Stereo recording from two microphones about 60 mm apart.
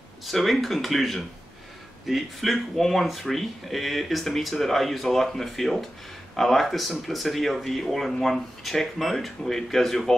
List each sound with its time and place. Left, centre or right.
0.3 s speech: centre